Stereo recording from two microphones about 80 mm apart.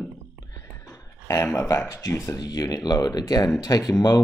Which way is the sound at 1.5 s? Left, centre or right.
Left.